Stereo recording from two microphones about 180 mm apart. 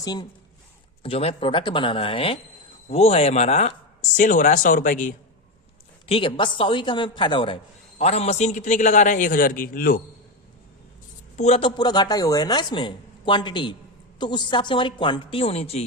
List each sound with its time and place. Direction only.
0.0 s a woman's voice: 20° left (ahead or behind); by 5.1 s 45° left (ahead or behind)
6.1 s a woman's voice: 30° left (ahead or behind); by 10.0 s 55° left (ahead or behind)
11.3 s speech: 35° left (ahead or behind)